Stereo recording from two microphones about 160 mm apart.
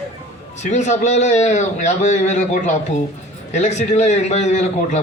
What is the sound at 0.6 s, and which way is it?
A man's voice, 45° left (ahead or behind).